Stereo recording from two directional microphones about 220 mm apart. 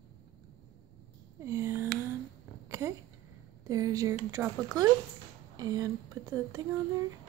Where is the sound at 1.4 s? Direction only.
15° right (ahead or behind).